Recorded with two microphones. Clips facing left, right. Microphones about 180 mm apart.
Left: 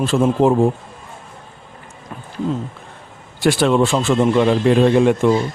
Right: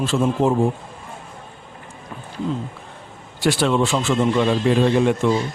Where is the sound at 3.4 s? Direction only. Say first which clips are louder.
Left 4 dB; 50° left (ahead or behind).